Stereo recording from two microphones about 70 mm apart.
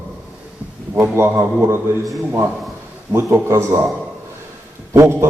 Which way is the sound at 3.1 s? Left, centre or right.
Right.